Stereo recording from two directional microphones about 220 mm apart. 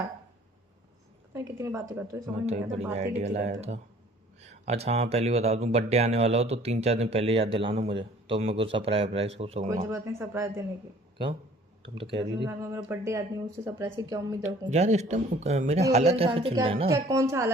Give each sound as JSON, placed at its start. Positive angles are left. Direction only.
{"t": 1.3, "sound": "speech", "side_deg": -10}
{"t": 2.5, "sound": "speech", "side_deg": -30}
{"t": 9.9, "sound": "speech", "side_deg": -10}
{"t": 11.8, "sound": "speech", "side_deg": -25}
{"t": 12.5, "sound": "speech", "side_deg": -10}
{"t": 14.4, "sound": "speech", "side_deg": -30}
{"t": 17.1, "sound": "speech", "side_deg": -15}